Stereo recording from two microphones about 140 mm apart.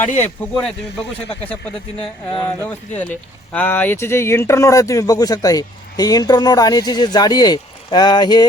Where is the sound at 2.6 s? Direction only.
15° left (ahead or behind).